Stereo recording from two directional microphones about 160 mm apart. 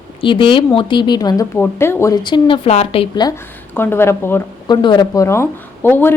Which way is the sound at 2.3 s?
35° left (ahead or behind).